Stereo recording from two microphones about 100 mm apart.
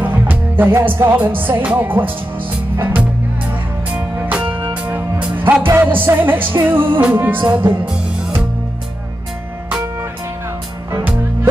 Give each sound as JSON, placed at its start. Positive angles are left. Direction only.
{"t": 0.0, "sound": "music", "side_deg": -20}
{"t": 2.8, "sound": "speech", "side_deg": -20}
{"t": 4.2, "sound": "music", "side_deg": -15}
{"t": 7.8, "sound": "music", "side_deg": -10}
{"t": 10.9, "sound": "music", "side_deg": -25}